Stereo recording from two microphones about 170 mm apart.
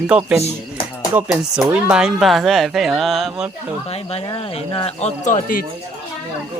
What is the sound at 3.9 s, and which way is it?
Speech, 35° left (ahead or behind).